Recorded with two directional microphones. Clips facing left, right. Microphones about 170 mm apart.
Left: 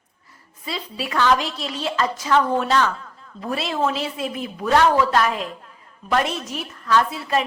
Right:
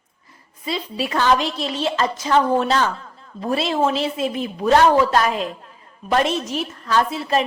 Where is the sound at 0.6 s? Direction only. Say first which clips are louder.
Right 4 dB; 20° right (ahead or behind).